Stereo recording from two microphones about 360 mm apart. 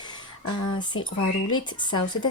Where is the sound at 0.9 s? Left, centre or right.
Left.